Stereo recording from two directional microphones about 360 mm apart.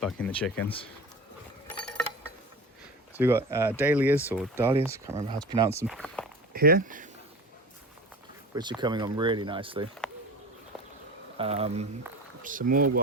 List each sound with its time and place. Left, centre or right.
0.0 s speech: centre
0.6 s speech: centre
1.7 s mechanisms: centre
3.2 s speech: centre
5.9 s speech: centre
6.5 s speech: right
8.8 s speech: centre
11.3 s speech: centre